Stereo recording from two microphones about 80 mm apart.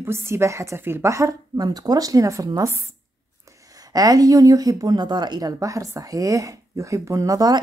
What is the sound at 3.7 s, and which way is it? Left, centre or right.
A woman's voice, right.